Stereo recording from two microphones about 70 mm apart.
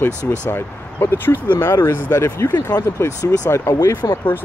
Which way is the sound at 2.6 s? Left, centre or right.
Left.